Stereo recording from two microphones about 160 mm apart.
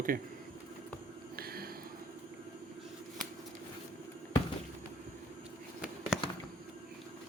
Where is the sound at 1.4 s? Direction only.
70° right (ahead or behind).